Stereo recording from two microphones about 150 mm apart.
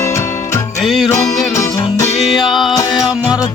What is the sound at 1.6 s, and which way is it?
Music, 25° left (ahead or behind).